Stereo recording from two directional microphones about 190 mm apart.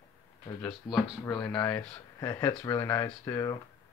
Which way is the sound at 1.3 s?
5° left (ahead or behind).